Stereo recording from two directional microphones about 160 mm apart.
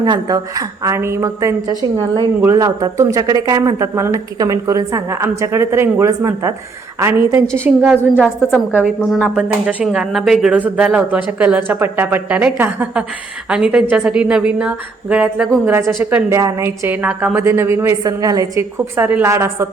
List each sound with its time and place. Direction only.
0.0 s a woman's voice: 25° right (ahead or behind); by 8.9 s 5° right (ahead or behind)
9.0 s speech: 10° left (ahead or behind)
9.3 s a woman's voice: 5° right (ahead or behind); by 18.6 s 20° right (ahead or behind)
18.9 s speech: 10° right (ahead or behind)